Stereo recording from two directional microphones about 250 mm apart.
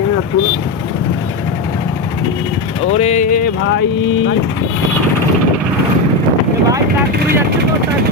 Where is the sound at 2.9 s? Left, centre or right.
Left.